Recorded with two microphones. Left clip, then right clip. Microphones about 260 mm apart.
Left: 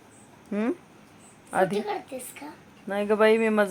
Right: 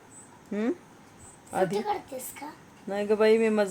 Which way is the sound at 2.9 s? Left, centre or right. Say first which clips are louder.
Left 2 dB; centre.